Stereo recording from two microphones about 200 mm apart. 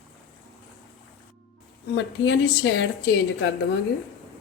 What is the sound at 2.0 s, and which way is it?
A woman's voice, 65° left (ahead or behind).